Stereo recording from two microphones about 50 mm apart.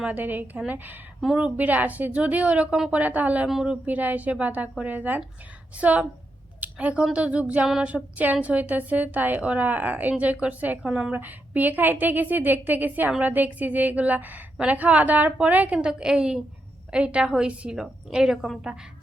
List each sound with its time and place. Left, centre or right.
0.1 s a woman's voice: right
3.5 s a woman's voice: centre
3.8 s a woman's voice: right
10.8 s a woman's voice: centre
11.1 s a woman's voice: right
15.8 s a woman's voice: centre